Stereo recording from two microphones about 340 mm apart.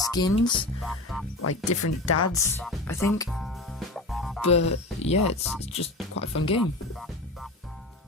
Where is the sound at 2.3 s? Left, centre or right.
Centre.